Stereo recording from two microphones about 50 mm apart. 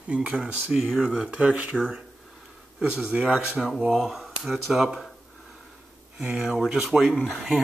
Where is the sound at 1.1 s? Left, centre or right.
Right.